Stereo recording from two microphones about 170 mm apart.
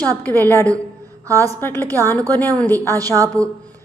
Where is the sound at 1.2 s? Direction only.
20° right (ahead or behind).